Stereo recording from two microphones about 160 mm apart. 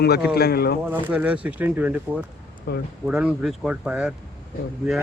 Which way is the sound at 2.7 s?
80° left.